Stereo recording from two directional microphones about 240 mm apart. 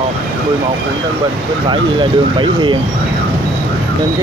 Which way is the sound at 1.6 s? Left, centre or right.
Centre.